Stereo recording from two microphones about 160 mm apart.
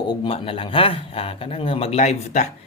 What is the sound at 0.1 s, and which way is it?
Speech, 30° left (ahead or behind).